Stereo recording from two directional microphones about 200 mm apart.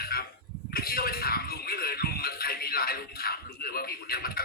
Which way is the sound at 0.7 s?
50° left (ahead or behind).